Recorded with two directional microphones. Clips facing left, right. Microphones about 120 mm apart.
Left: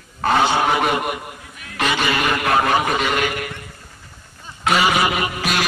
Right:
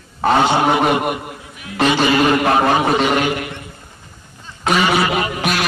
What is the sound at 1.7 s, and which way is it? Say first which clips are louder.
A man's voice: right 6 dB; 30° right (ahead or behind).